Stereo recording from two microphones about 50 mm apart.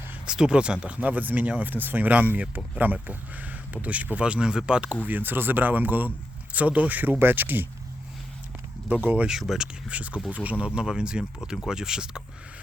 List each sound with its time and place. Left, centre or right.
0.3 s speech: centre
5.0 s speech: right
8.9 s speech: right
9.4 s speech: centre
9.9 s speech: right